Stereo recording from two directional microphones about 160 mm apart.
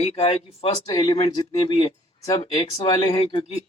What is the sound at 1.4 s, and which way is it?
Speech, 25° left (ahead or behind).